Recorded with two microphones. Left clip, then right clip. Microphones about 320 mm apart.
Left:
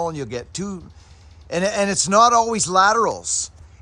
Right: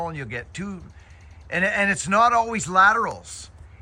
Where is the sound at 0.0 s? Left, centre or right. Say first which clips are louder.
Left 5 dB; centre.